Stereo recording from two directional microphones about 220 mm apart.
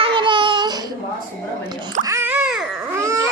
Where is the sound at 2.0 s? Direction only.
10° right (ahead or behind).